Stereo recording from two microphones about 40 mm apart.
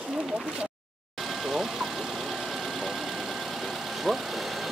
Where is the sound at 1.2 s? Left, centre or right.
Centre.